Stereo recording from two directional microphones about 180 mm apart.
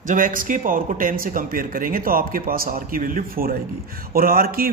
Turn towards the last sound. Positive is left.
turn(degrees=-55)  # may be behind; listen again after turning